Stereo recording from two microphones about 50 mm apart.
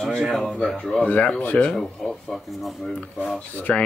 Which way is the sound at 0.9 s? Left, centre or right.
Left.